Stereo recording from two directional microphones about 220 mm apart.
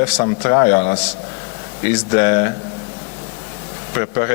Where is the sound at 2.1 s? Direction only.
20° left (ahead or behind).